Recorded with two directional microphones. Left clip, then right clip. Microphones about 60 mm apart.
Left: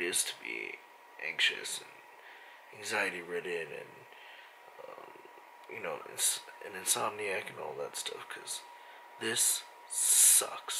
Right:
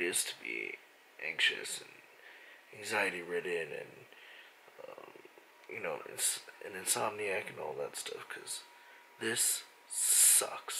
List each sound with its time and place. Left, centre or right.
0.0 s speech: centre
2.8 s speech: centre
5.7 s speech: centre
7.9 s speech: centre
9.2 s speech: centre